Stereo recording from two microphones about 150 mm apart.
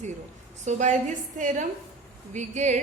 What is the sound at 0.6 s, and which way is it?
A woman's voice, 50° right (ahead or behind).